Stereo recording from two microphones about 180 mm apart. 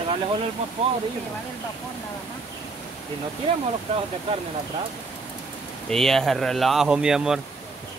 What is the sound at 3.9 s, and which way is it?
Speech, 40° right (ahead or behind).